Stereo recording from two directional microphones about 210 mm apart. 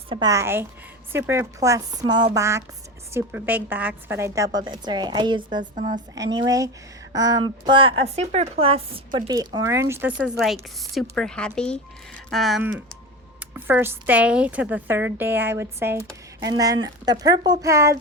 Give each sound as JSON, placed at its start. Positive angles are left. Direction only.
{"t": 0.1, "sound": "a woman's voice", "side_deg": -15}
{"t": 5.7, "sound": "a woman's voice", "side_deg": -35}
{"t": 6.3, "sound": "a woman's voice", "side_deg": -15}